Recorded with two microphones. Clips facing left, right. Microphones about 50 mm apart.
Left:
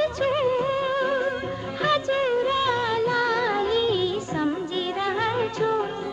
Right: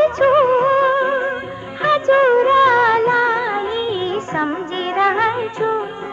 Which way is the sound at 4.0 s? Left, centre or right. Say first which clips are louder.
Right 5 dB; right.